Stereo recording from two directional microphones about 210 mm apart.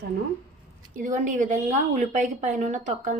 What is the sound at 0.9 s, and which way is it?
A woman's voice, 40° right (ahead or behind).